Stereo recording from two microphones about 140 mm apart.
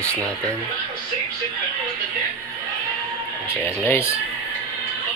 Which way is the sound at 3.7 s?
20° left (ahead or behind).